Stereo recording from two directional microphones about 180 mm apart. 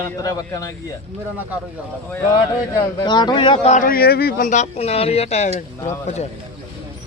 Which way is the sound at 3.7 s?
50° left (ahead or behind).